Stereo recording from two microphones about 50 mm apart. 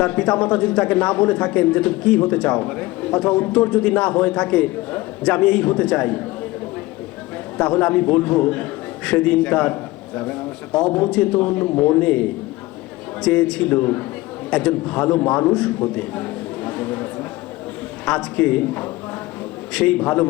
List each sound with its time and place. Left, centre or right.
0.0 s a man's voice: centre
7.6 s a man's voice: left
10.8 s a man's voice: left
13.2 s a man's voice: centre
16.0 s a sound: left
18.0 s a man's voice: centre